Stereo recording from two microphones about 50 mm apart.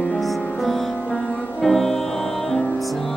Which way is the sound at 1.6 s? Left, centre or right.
Centre.